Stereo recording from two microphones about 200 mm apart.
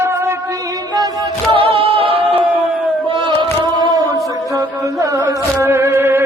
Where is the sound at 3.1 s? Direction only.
25° right (ahead or behind).